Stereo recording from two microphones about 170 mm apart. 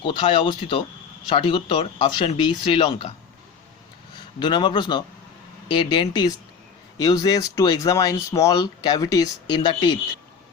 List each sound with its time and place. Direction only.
0.0 s speech: 30° left (ahead or behind)
4.4 s speech: 25° left (ahead or behind)